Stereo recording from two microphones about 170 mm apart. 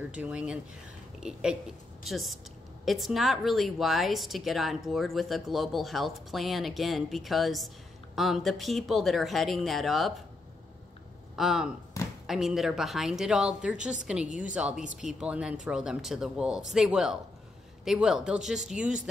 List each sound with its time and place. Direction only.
0.1 s speech: 5° right (ahead or behind)
11.3 s speech: centre (ahead or behind)
12.0 s a sound: 20° left (ahead or behind)
12.3 s speech: centre (ahead or behind)